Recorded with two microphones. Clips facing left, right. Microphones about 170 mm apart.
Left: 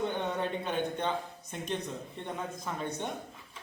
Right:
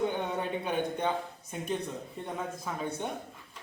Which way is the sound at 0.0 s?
10° right (ahead or behind).